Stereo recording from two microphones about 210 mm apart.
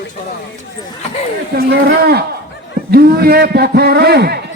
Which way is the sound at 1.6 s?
45° right (ahead or behind).